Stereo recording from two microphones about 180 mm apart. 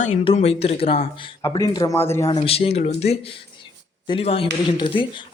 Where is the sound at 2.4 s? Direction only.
35° left (ahead or behind).